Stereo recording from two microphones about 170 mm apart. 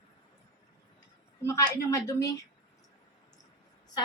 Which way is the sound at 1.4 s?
15° left (ahead or behind).